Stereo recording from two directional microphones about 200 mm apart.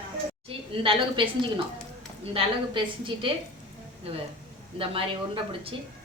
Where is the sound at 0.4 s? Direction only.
25° right (ahead or behind).